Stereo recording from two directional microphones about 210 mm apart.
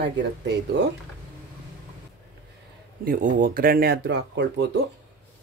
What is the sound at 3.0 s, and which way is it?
Speech, 40° right (ahead or behind).